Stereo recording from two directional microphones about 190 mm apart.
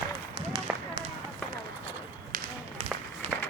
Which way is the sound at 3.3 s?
5° right (ahead or behind).